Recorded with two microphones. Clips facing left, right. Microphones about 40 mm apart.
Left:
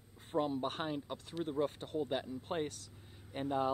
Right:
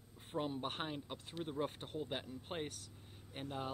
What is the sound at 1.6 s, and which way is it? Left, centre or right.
Speech, right.